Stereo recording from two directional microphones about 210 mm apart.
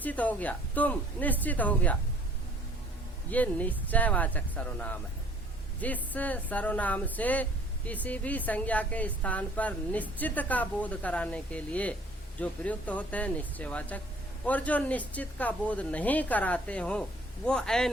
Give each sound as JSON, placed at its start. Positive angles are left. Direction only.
{"t": 0.0, "sound": "a woman's voice", "side_deg": 5}
{"t": 3.2, "sound": "a woman's voice", "side_deg": 5}